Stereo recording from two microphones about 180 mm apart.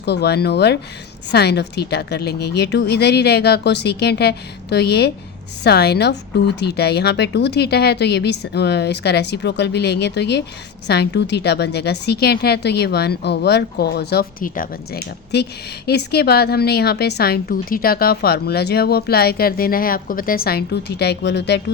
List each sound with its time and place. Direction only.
0.0 s a woman's voice: 65° left (ahead or behind)